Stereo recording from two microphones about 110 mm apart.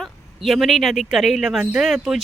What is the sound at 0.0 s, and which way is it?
A woman's voice, centre (ahead or behind).